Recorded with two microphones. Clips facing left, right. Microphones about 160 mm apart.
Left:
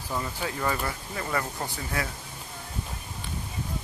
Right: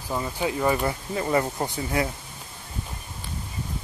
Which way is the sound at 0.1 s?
15° right (ahead or behind).